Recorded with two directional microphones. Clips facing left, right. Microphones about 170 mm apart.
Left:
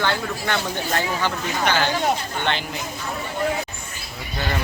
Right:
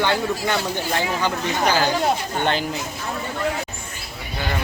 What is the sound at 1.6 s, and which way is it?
Speech, 35° right (ahead or behind).